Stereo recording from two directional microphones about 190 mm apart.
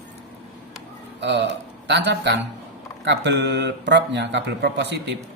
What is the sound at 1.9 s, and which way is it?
Speech, 65° right (ahead or behind).